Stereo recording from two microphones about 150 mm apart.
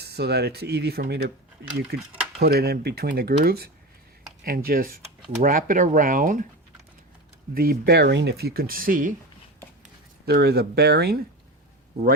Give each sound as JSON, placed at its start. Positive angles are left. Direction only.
{"t": 0.0, "sound": "speech", "side_deg": -90}
{"t": 7.5, "sound": "speech", "side_deg": -90}
{"t": 10.2, "sound": "speech", "side_deg": -90}